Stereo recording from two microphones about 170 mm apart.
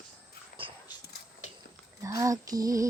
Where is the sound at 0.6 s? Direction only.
30° right (ahead or behind).